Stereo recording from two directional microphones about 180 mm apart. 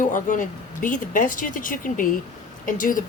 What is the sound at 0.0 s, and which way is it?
Speech, 45° left (ahead or behind).